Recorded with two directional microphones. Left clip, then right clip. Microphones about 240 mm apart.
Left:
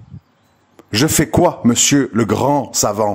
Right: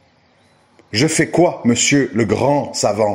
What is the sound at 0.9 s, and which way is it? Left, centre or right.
A man's voice, left.